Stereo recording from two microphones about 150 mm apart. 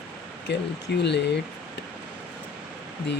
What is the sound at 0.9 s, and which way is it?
Speech, 90° left.